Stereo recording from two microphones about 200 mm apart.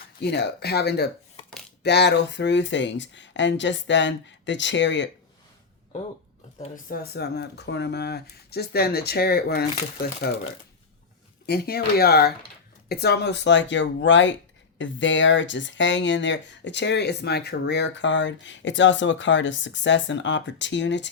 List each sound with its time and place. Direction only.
0.2 s speech: 55° left (ahead or behind)
6.9 s speech: 50° left (ahead or behind)
11.4 s speech: 50° left (ahead or behind)